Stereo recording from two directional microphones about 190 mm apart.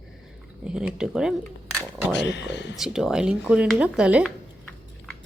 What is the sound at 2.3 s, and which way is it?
Speech, 65° left (ahead or behind).